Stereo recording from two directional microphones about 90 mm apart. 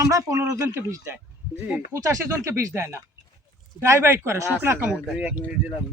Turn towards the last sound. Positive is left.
turn(degrees=-15)  # may be behind; listen again after turning